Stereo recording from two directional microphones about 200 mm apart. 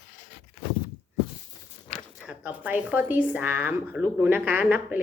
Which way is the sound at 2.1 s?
5° right (ahead or behind).